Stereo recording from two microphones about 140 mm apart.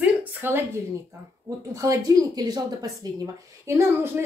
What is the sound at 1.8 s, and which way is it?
A woman's voice, 25° right (ahead or behind).